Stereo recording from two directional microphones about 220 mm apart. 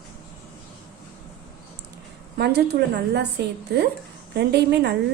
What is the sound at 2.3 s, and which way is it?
A woman's voice, 45° right (ahead or behind).